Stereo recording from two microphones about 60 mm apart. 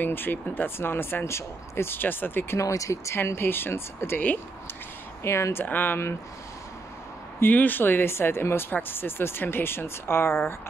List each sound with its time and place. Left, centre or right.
0.0 s speech: left
2.5 s speech: left
3.3 s speech: left
5.2 s speech: left
7.3 s speech: left